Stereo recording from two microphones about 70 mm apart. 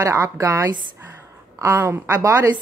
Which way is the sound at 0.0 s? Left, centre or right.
Right.